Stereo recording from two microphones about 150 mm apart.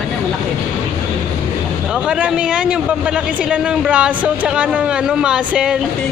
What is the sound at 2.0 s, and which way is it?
A man's voice, 10° right (ahead or behind).